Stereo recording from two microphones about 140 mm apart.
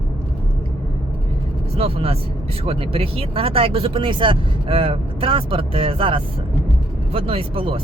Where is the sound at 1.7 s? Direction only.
45° right (ahead or behind).